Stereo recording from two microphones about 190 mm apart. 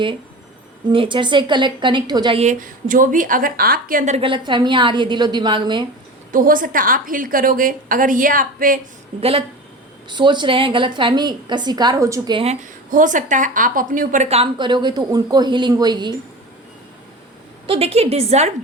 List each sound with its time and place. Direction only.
0.9 s a woman's voice: 25° right (ahead or behind)
2.4 s a woman's voice: 40° right (ahead or behind); by 5.9 s 25° right (ahead or behind)
6.3 s a woman's voice: 45° right (ahead or behind)
10.1 s a woman's voice: 25° right (ahead or behind)
12.9 s a woman's voice: 45° right (ahead or behind); by 16.1 s 20° right (ahead or behind)
17.7 s a woman's voice: 30° right (ahead or behind)